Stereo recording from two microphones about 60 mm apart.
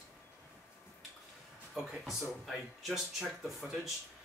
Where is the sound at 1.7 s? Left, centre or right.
Centre.